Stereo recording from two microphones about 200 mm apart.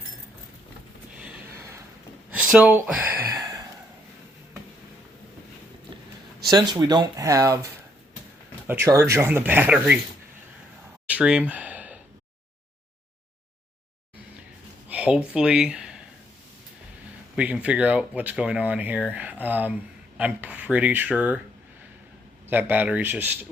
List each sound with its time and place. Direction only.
1.1 s a sound: 5° right (ahead or behind)
2.3 s speech: 5° right (ahead or behind)
3.4 s a sound: 20° right (ahead or behind)
6.5 s speech: 20° right (ahead or behind)
11.1 s gasp: 5° right (ahead or behind)
14.8 s speech: 5° right (ahead or behind)
17.3 s speech: 5° right (ahead or behind)
22.4 s speech: 10° right (ahead or behind)